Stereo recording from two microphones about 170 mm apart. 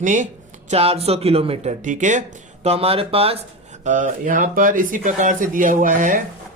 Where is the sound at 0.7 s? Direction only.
35° right (ahead or behind).